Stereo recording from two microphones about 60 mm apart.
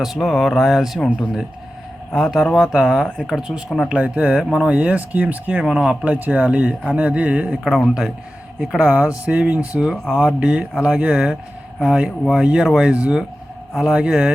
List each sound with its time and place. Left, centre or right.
0.0 s speech: centre
2.4 s speech: centre
2.7 s speech: centre
3.8 s speech: centre
4.4 s speech: centre
4.7 s speech: right
5.6 s speech: centre
6.1 s speech: right
7.6 s speech: centre